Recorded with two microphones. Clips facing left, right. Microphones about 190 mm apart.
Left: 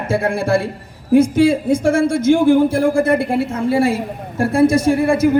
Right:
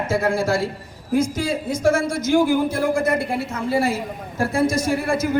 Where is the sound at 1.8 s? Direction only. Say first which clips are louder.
Left 4 dB; 30° left (ahead or behind).